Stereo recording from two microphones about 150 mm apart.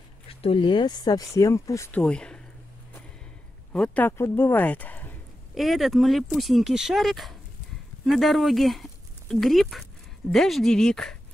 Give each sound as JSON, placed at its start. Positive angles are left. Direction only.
{"t": 0.3, "sound": "speech", "side_deg": 40}
{"t": 2.0, "sound": "speech", "side_deg": 5}
{"t": 3.7, "sound": "speech", "side_deg": 10}
{"t": 5.5, "sound": "speech", "side_deg": 0}